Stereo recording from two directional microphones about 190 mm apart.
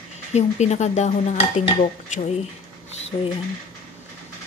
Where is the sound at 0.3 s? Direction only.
35° left (ahead or behind).